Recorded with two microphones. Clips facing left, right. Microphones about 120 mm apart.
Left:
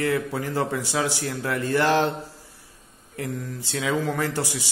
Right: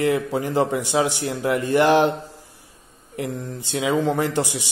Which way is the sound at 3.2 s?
25° right (ahead or behind).